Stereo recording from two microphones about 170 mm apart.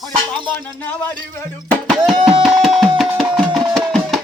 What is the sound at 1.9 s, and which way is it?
Tabla, centre (ahead or behind).